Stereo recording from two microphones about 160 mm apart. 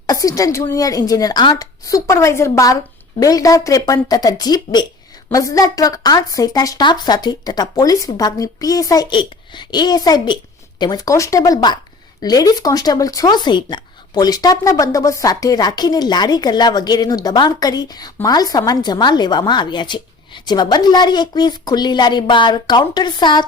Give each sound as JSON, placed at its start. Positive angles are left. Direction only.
{"t": 0.1, "sound": "speech", "side_deg": 20}